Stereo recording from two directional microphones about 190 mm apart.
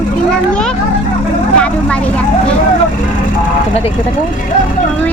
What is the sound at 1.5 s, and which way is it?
Vehicle, 5° left (ahead or behind).